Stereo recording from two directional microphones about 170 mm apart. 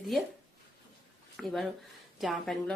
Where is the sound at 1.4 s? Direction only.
Centre (ahead or behind).